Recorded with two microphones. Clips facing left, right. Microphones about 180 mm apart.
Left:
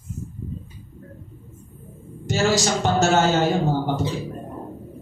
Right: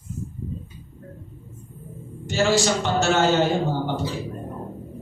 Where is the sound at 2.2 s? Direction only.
40° left (ahead or behind).